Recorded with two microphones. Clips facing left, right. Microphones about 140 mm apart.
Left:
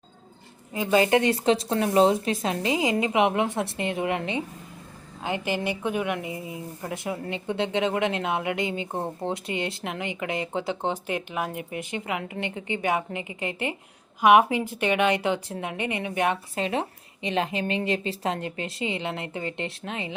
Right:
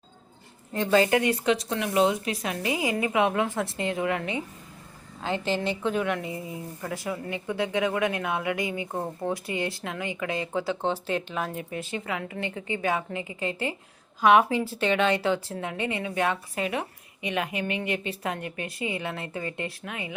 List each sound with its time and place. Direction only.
0.9 s a woman's voice: 20° left (ahead or behind)